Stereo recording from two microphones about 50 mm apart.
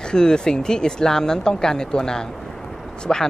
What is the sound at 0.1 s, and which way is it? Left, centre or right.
Speech, centre.